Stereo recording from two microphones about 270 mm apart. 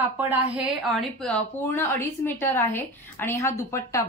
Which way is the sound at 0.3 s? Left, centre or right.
Centre.